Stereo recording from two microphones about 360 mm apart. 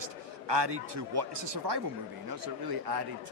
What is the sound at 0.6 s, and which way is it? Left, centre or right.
Speech, right.